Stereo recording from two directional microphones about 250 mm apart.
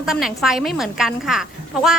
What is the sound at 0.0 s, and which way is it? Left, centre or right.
A woman's voice, centre.